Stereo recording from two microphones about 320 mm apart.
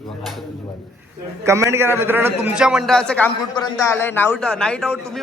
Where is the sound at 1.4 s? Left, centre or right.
Centre.